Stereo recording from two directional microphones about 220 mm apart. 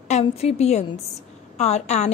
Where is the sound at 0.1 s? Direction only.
30° left (ahead or behind).